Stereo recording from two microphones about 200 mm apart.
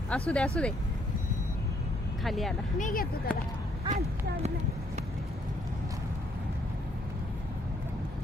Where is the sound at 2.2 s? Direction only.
Centre (ahead or behind).